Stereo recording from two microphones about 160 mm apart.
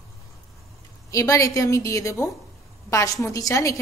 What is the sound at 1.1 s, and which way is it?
A woman's voice, 20° left (ahead or behind).